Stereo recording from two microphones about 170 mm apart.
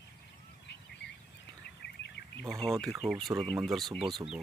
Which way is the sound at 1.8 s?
75° left (ahead or behind).